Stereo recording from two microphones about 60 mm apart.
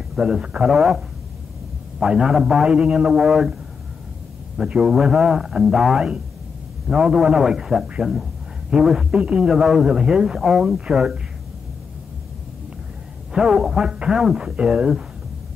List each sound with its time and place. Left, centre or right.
0.1 s a man's voice: centre
0.7 s a man's voice: centre
4.6 s a man's voice: centre
8.1 s a sound: centre
8.8 s a man's voice: centre
13.3 s a man's voice: centre